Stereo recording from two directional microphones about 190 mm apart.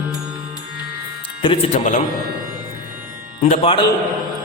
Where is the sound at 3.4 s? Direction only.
30° left (ahead or behind).